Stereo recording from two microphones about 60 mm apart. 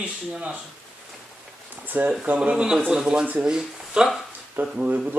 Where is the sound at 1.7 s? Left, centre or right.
Right.